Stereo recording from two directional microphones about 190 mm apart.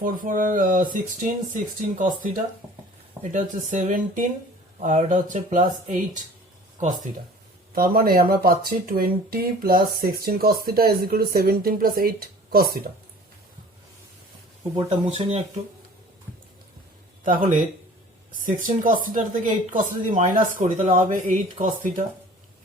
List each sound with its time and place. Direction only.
0.0 s speech: 45° right (ahead or behind)
7.8 s speech: 50° right (ahead or behind)
14.8 s speech: 30° right (ahead or behind)
17.2 s speech: 45° right (ahead or behind)